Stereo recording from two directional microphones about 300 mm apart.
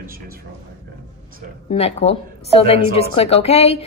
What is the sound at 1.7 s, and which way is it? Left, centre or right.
A woman's voice, left.